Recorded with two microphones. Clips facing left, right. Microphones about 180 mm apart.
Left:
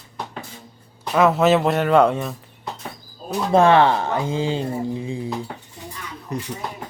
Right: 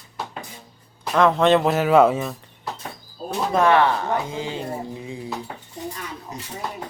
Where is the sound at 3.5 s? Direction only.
25° left (ahead or behind).